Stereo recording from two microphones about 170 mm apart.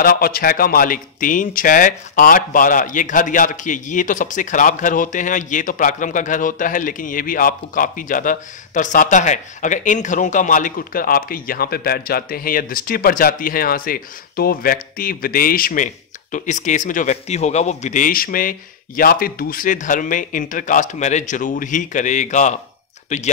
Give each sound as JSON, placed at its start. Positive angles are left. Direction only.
{"t": 0.0, "sound": "speech", "side_deg": 60}